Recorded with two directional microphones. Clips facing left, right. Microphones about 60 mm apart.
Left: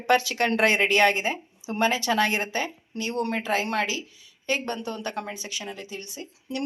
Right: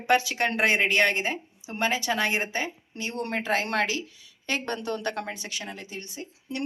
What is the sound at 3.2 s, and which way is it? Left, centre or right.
A woman's voice, right.